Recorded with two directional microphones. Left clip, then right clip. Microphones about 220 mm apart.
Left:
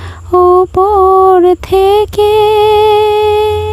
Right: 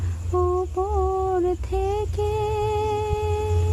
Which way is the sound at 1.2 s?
45° left (ahead or behind).